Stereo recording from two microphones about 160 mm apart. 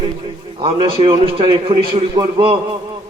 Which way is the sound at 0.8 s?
35° right (ahead or behind).